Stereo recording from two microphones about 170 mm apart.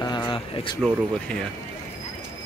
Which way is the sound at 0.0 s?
20° left (ahead or behind).